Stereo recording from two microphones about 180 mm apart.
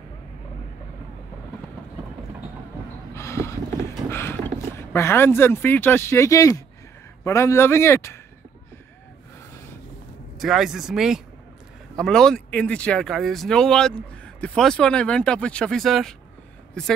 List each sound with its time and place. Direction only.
3.2 s a sound: 15° left (ahead or behind)
4.1 s a man's voice: 15° left (ahead or behind)
10.4 s speech: centre (ahead or behind)